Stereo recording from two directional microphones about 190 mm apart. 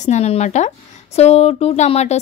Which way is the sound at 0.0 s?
35° left (ahead or behind).